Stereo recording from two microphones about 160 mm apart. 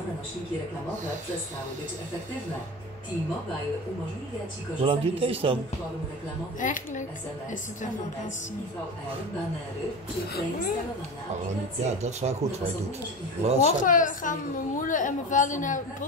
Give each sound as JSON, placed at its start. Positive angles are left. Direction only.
{"t": 4.8, "sound": "speech", "side_deg": -35}
{"t": 6.6, "sound": "a man's voice", "side_deg": 50}
{"t": 11.8, "sound": "speech", "side_deg": -45}
{"t": 13.4, "sound": "speech", "side_deg": -40}
{"t": 13.7, "sound": "a woman's voice", "side_deg": 55}